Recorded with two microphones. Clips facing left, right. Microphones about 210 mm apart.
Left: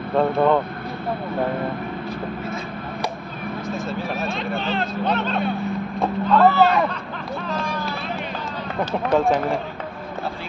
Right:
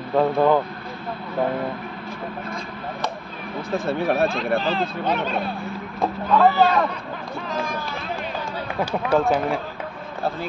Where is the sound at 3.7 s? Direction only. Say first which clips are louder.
Right 7 dB; 60° right (ahead or behind).